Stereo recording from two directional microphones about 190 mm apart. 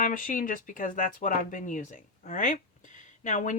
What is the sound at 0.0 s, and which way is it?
Speech, 45° left (ahead or behind).